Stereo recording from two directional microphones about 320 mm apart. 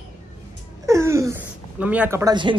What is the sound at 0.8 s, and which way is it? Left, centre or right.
Speech, centre.